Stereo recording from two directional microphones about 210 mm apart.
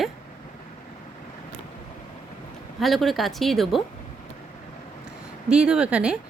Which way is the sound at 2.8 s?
Centre (ahead or behind).